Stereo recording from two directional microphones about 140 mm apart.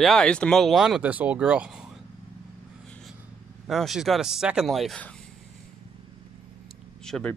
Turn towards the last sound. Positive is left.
turn(degrees=5)  # may be behind; listen again after turning